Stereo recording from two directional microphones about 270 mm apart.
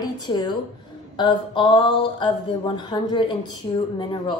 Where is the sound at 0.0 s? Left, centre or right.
Centre.